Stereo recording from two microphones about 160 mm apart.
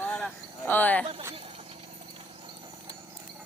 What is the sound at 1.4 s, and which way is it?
Vehicle, 35° right (ahead or behind).